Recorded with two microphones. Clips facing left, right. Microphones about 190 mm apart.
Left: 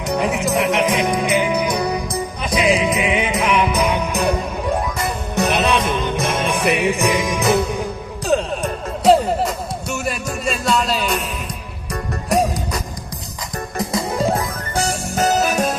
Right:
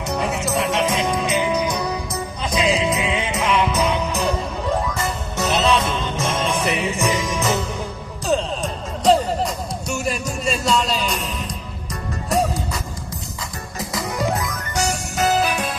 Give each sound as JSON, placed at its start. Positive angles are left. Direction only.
{"t": 0.2, "sound": "music", "side_deg": 15}
{"t": 10.1, "sound": "music", "side_deg": 0}
{"t": 12.3, "sound": "music", "side_deg": 15}
{"t": 13.9, "sound": "music", "side_deg": 25}
{"t": 14.8, "sound": "music", "side_deg": 50}